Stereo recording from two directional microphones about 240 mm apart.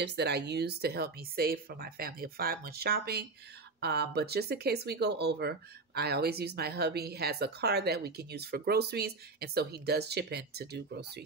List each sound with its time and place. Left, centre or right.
0.0 s speech: right